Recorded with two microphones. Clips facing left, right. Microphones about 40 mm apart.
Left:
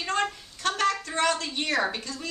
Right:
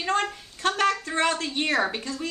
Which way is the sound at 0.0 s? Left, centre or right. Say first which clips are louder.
Right 2 dB; right.